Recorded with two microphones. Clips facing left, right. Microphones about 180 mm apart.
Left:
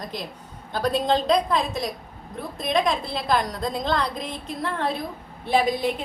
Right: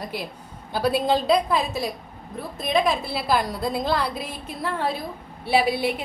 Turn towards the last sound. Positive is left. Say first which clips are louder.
# even
turn(degrees=-10)  # may be behind; listen again after turning